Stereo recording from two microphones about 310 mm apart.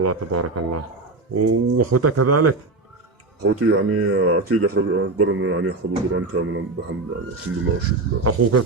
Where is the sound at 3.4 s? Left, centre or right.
Right.